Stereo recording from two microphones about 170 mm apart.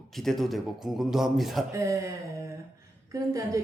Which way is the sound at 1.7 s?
15° right (ahead or behind).